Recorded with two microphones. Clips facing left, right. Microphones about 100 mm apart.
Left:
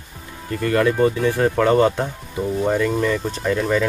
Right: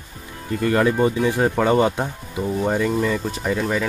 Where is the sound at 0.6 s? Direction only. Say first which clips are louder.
Left 1 dB; 20° right (ahead or behind).